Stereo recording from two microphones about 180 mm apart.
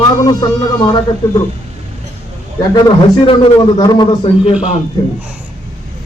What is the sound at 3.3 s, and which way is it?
A man's voice, 25° left (ahead or behind).